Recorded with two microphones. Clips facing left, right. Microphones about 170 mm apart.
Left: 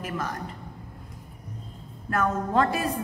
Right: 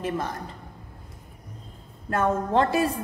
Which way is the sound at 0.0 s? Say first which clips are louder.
Right 3 dB; 25° right (ahead or behind).